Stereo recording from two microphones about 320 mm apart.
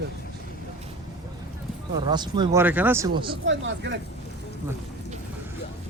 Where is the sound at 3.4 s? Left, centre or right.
Right.